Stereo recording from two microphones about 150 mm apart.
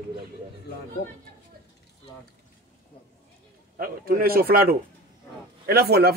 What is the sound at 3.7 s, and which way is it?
A man's voice, 80° right.